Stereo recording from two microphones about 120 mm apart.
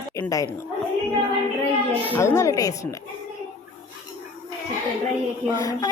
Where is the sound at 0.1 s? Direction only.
25° left (ahead or behind).